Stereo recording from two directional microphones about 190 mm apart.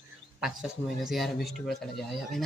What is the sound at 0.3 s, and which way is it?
Speech, 5° right (ahead or behind).